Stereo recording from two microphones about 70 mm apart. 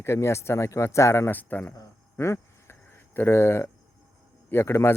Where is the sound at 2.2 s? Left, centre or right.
Left.